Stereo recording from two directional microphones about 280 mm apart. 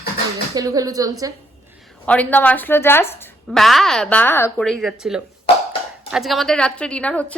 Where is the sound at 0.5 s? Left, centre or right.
Centre.